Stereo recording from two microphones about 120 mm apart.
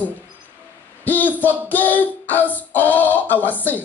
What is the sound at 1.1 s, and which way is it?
Child singing, 15° left (ahead or behind).